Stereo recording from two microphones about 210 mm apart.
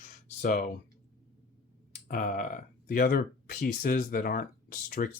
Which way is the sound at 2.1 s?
40° left (ahead or behind).